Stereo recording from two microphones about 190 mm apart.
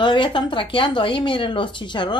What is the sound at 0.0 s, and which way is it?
Speech, 25° left (ahead or behind).